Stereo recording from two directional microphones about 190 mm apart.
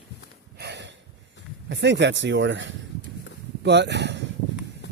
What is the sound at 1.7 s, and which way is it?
Speech, 65° right (ahead or behind).